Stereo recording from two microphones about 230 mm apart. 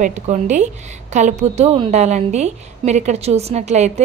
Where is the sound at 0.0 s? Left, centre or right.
Right.